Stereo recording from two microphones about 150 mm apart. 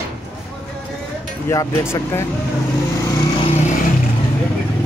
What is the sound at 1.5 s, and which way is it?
Speech, 20° left (ahead or behind).